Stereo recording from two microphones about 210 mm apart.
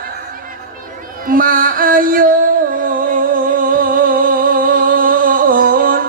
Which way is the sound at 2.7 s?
40° right (ahead or behind).